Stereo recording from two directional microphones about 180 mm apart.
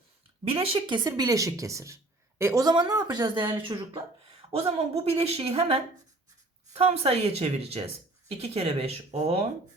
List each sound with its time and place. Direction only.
0.4 s a woman's voice: 30° right (ahead or behind)